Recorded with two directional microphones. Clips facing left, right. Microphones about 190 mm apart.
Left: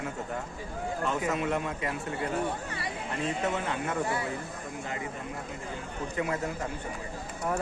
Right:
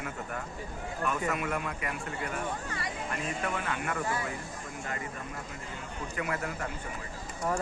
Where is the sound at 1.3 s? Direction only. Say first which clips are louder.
Left 3 dB; 25° left (ahead or behind).